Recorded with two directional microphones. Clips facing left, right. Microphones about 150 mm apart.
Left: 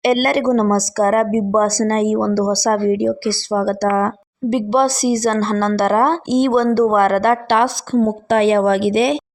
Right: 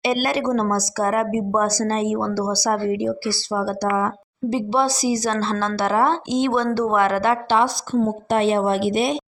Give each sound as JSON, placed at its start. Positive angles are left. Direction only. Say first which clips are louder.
{"t": 0.0, "sound": "a woman's voice", "louder": "left 6 dB", "side_deg": 60}